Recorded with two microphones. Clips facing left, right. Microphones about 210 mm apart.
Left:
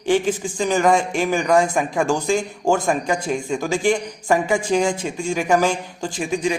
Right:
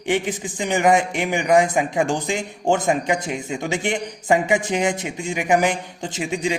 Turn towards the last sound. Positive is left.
turn(degrees=-25)  # may be behind; listen again after turning